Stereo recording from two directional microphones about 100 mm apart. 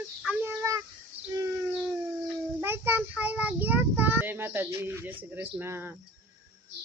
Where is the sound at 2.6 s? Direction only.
20° right (ahead or behind).